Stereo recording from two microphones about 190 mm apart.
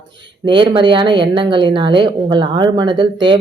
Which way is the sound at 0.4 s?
25° right (ahead or behind).